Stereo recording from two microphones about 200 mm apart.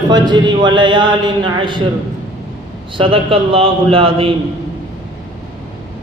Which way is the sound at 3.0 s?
25° right (ahead or behind).